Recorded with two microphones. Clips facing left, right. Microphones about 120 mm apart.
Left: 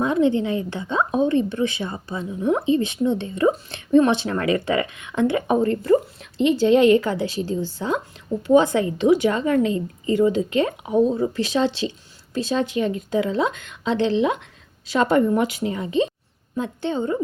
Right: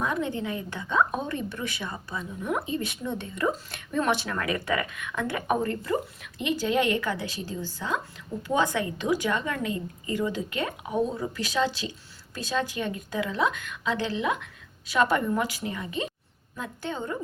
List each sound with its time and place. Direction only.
0.0 s a woman's voice: 25° left (ahead or behind)